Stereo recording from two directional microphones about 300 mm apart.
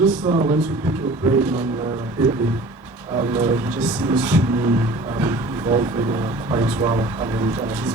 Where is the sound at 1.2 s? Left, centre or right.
Centre.